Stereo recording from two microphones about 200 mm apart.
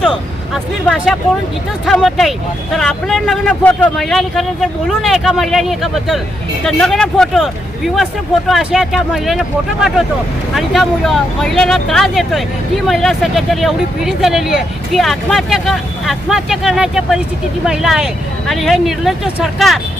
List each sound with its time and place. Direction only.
0.0 s speech: centre (ahead or behind)
8.4 s speech: centre (ahead or behind)
10.5 s speech: centre (ahead or behind)